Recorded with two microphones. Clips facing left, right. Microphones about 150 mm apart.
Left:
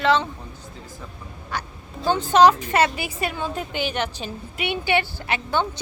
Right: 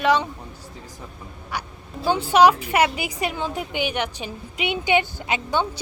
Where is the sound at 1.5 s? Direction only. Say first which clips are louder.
Even; 10° right (ahead or behind).